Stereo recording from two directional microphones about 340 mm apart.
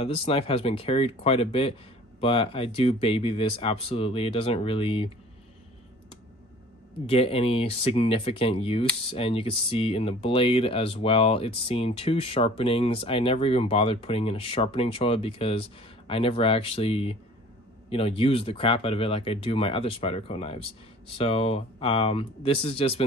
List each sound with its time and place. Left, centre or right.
0.0 s speech: centre
7.1 s speech: centre